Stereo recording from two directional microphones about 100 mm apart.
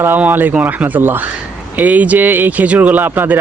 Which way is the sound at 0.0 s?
20° right (ahead or behind).